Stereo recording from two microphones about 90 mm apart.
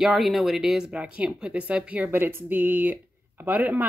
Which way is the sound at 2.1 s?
25° right (ahead or behind).